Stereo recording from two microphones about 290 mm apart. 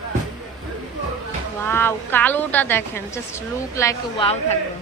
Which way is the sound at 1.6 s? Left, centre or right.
Centre.